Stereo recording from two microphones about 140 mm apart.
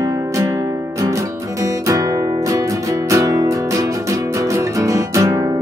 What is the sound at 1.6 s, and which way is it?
Music, 25° right (ahead or behind).